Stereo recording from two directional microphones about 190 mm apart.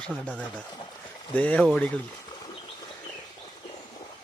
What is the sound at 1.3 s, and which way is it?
Speech, 10° left (ahead or behind).